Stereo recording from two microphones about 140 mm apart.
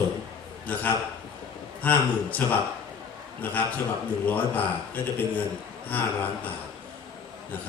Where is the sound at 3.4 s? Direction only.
10° left (ahead or behind).